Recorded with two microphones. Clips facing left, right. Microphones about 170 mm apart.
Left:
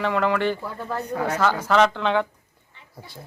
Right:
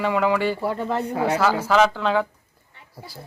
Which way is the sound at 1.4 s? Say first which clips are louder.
Even; 5° right (ahead or behind).